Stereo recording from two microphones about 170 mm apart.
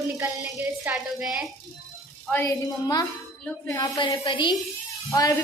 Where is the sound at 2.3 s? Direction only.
20° left (ahead or behind).